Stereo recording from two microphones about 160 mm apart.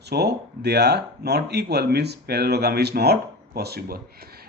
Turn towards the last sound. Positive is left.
turn(degrees=-70)  # may be behind; listen again after turning